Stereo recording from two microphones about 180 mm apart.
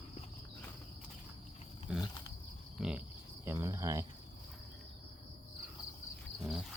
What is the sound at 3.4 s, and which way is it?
Speech, 15° right (ahead or behind).